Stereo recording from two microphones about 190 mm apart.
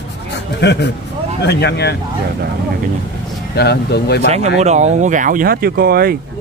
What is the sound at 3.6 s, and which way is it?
Speech, 60° left (ahead or behind).